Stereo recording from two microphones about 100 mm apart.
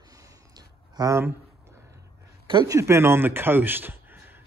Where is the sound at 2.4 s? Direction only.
55° right (ahead or behind).